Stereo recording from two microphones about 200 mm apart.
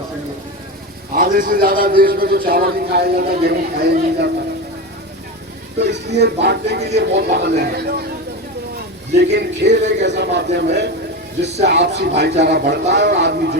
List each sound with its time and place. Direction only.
1.1 s a man's voice: 45° right (ahead or behind)
5.8 s a man's voice: 55° right (ahead or behind)
9.1 s speech: 60° right (ahead or behind)